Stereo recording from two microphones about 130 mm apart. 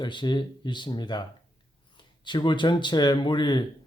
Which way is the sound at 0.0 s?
35° left (ahead or behind).